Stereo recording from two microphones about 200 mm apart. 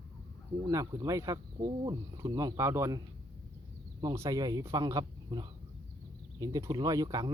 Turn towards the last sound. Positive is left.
turn(degrees=-20)  # may be behind; listen again after turning